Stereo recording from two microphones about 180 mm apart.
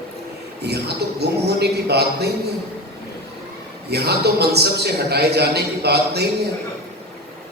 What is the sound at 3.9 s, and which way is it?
A man's voice, 65° right (ahead or behind).